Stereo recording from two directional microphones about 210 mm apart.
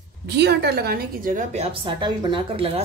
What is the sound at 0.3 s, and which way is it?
Speech, 55° right (ahead or behind).